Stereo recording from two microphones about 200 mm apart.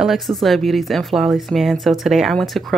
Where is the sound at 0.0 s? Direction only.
Centre (ahead or behind).